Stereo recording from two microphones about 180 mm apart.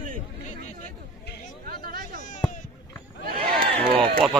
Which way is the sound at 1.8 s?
60° right (ahead or behind).